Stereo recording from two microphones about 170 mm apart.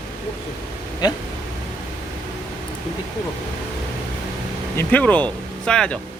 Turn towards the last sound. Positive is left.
turn(degrees=5)  # may be behind; listen again after turning